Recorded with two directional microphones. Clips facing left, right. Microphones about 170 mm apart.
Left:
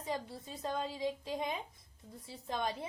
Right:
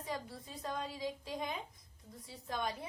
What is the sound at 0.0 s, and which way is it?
A woman's voice, 25° left (ahead or behind).